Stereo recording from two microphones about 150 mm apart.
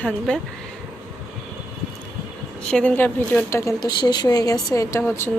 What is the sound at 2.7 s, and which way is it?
A woman's voice, 5° left (ahead or behind).